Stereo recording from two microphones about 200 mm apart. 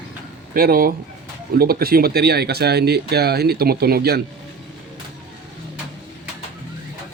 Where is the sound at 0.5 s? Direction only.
45° right (ahead or behind).